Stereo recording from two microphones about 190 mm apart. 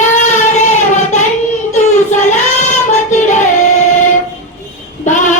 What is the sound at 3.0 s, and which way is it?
Child singing, 40° left (ahead or behind).